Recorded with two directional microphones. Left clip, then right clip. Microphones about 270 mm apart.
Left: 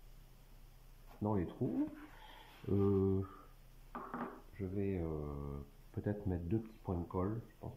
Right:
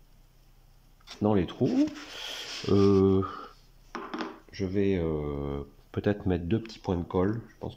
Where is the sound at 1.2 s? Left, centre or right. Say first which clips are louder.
Right 12 dB; right.